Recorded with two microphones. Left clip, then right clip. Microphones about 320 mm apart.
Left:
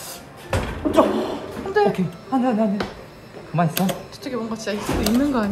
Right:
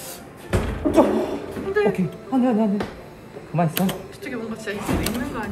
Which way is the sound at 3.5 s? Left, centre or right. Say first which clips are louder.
Left 1 dB; left.